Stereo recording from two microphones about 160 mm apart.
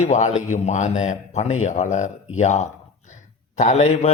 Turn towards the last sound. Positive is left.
turn(degrees=45)  # may be behind; listen again after turning